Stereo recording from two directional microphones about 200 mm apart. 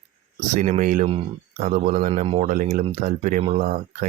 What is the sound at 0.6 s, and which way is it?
Speech, 35° right (ahead or behind).